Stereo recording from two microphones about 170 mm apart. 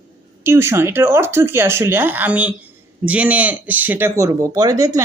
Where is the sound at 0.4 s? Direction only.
15° right (ahead or behind).